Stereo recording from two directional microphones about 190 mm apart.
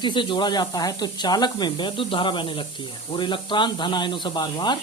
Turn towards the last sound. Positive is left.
turn(degrees=25)  # may be behind; listen again after turning